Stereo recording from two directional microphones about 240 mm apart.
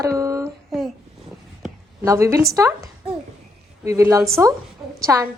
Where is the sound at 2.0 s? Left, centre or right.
Centre.